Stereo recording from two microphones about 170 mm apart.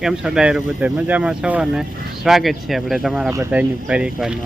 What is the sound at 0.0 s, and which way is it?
Speech, 5° right (ahead or behind).